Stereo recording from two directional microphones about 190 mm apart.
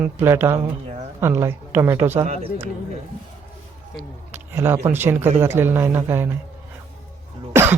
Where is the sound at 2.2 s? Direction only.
35° right (ahead or behind).